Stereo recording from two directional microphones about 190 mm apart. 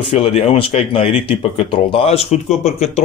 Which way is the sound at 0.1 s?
30° left (ahead or behind).